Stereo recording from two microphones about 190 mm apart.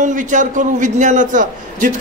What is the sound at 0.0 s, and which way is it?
A man's voice, 40° right (ahead or behind).